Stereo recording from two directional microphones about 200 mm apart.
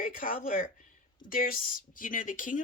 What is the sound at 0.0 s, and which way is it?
Speech, 45° left (ahead or behind).